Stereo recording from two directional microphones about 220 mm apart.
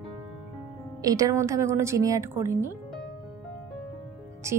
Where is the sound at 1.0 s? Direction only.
15° right (ahead or behind).